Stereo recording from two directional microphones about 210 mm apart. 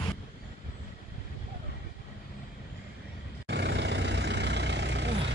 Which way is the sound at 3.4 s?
55° right (ahead or behind).